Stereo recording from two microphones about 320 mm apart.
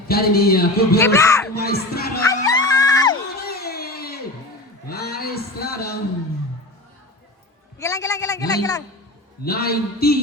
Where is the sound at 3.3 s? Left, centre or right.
Left.